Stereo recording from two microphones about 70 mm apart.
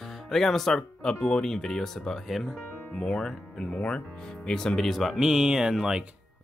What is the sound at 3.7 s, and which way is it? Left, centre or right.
Speech, centre.